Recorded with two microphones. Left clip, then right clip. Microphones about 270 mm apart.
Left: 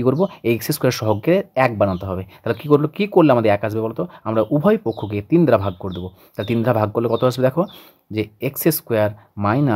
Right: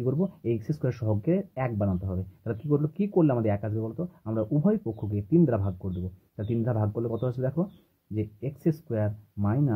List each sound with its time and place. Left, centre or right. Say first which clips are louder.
0.0 s speech: left 12 dB; left